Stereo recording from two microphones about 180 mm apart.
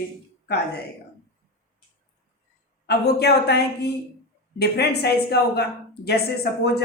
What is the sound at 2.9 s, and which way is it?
Speech, 65° left (ahead or behind).